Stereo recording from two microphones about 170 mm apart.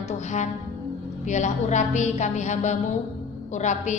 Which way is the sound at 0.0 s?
45° left (ahead or behind).